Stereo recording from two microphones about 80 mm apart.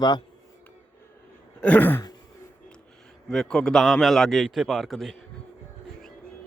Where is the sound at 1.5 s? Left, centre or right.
Centre.